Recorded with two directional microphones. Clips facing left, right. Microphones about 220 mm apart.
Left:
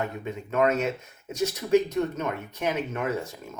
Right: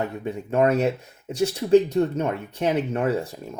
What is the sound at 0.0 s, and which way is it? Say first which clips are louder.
Speech: right 4 dB; 30° right (ahead or behind).